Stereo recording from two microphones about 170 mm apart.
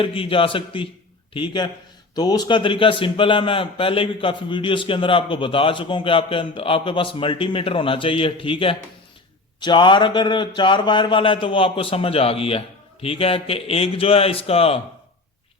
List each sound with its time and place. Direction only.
0.0 s a man's voice: 30° left (ahead or behind)